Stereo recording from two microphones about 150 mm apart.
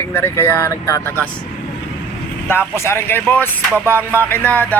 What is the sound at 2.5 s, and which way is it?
Speech, 15° left (ahead or behind).